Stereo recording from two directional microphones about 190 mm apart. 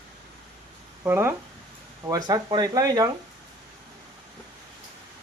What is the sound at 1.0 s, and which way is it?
Speech, 10° right (ahead or behind).